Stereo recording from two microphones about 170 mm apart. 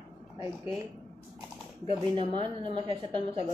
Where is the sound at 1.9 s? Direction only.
30° right (ahead or behind).